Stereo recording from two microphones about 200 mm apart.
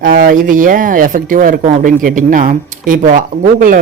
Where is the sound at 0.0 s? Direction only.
45° right (ahead or behind).